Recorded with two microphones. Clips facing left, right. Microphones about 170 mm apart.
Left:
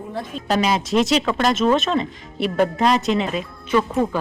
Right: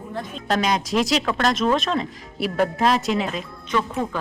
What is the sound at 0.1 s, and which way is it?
Speech, 5° left (ahead or behind).